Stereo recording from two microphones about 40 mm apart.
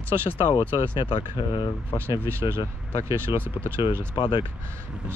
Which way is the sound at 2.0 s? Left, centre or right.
Right.